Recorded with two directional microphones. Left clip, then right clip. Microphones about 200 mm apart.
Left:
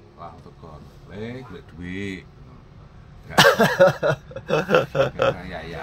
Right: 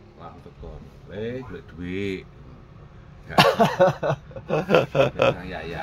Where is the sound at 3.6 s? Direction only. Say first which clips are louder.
Left 2 dB; 10° left (ahead or behind).